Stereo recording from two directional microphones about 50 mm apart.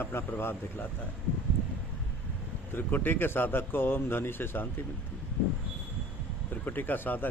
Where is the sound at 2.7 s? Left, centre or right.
Left.